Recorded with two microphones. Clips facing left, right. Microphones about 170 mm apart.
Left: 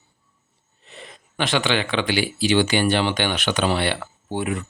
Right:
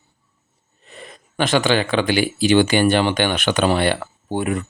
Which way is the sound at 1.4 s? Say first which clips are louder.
Right 4 dB; 45° right (ahead or behind).